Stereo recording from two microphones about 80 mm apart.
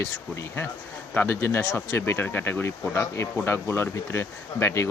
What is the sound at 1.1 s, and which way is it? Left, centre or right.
Speech, left.